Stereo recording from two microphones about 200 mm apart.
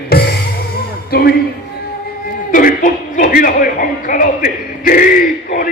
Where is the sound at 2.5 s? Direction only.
45° left (ahead or behind).